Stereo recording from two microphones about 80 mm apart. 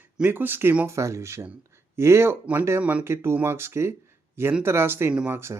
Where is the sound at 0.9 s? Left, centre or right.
Right.